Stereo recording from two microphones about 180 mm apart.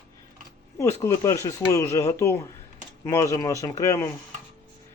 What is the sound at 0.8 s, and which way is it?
Speech, 15° left (ahead or behind).